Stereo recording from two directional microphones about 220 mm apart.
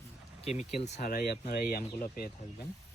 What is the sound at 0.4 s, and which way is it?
Speech, 30° left (ahead or behind).